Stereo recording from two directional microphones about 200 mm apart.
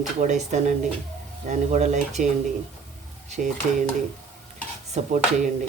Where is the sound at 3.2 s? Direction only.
35° right (ahead or behind).